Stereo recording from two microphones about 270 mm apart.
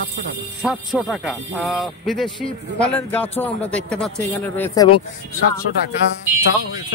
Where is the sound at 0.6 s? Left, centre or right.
Centre.